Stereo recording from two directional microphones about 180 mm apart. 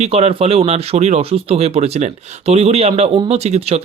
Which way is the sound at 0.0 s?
35° right (ahead or behind).